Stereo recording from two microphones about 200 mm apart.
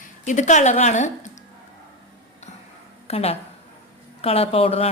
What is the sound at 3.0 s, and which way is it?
A woman's voice, 30° left (ahead or behind).